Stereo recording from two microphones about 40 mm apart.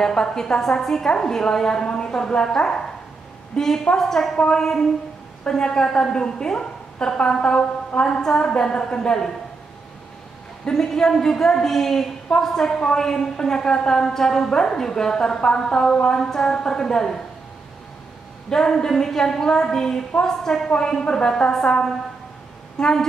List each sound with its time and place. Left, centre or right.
0.0 s a woman's voice: centre
10.7 s a woman's voice: centre
18.5 s a woman's voice: centre
22.8 s a woman's voice: centre